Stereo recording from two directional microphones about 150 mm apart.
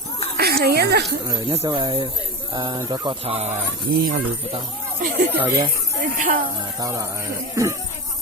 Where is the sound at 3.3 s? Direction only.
45° right (ahead or behind).